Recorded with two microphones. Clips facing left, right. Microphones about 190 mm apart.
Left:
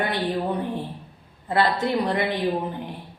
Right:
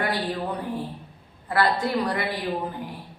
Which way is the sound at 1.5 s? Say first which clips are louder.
Left 1 dB; 25° left (ahead or behind).